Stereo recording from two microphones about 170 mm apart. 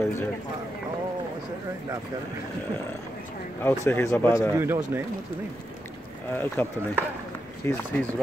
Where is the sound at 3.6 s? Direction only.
15° left (ahead or behind).